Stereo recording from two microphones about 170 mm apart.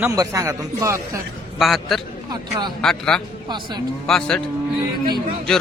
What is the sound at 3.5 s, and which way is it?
Speech, 25° right (ahead or behind).